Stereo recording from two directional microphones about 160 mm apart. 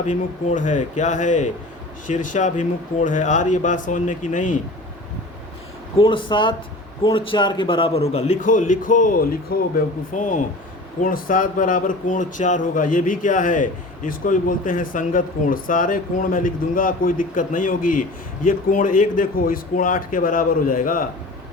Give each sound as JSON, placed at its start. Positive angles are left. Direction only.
{"t": 0.0, "sound": "a man's voice", "side_deg": 50}
{"t": 6.0, "sound": "a man's voice", "side_deg": 30}